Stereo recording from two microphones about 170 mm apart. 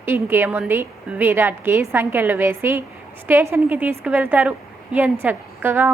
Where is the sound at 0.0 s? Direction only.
15° right (ahead or behind).